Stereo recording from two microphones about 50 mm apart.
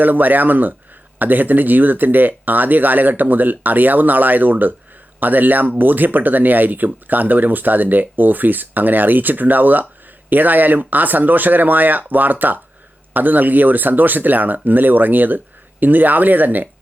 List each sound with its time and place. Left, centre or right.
0.0 s speech: right